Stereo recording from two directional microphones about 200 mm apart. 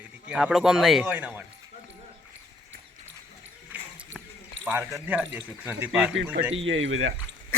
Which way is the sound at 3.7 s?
5° right (ahead or behind).